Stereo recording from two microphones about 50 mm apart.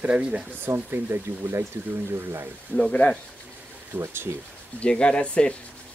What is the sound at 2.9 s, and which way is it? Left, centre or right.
Speech, left.